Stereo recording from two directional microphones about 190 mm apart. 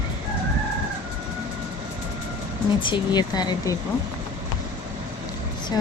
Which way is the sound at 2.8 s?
25° left (ahead or behind).